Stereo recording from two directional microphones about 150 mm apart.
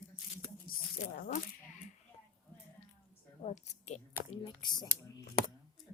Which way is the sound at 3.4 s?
50° left (ahead or behind).